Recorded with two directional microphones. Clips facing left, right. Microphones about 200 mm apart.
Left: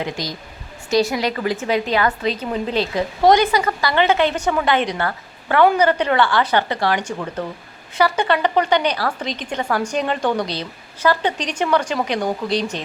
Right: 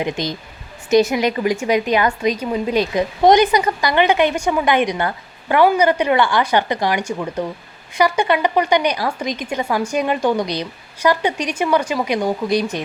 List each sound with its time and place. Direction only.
0.0 s a woman's voice: 20° right (ahead or behind)